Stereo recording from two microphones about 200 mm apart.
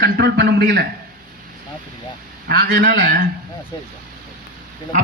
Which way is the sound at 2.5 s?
45° right (ahead or behind).